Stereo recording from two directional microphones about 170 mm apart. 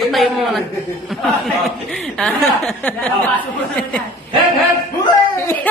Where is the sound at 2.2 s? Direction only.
5° left (ahead or behind).